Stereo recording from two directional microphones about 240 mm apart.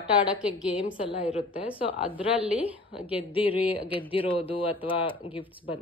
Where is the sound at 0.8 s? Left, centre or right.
Left.